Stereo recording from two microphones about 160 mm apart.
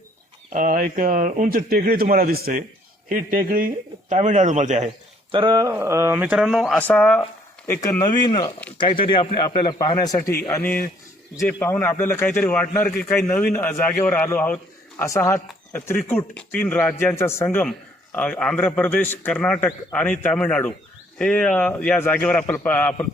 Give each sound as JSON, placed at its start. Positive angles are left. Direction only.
{"t": 0.5, "sound": "speech", "side_deg": -55}
{"t": 4.1, "sound": "a man's voice", "side_deg": -50}
{"t": 5.3, "sound": "speech", "side_deg": -30}
{"t": 5.6, "sound": "a man's voice", "side_deg": -15}
{"t": 7.7, "sound": "speech", "side_deg": 20}
{"t": 9.9, "sound": "speech", "side_deg": 20}
{"t": 10.5, "sound": "a man's voice", "side_deg": 10}